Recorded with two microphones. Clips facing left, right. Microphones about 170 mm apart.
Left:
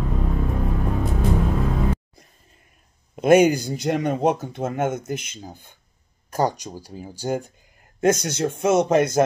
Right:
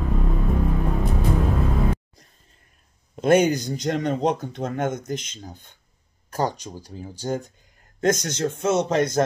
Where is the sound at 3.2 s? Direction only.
10° left (ahead or behind).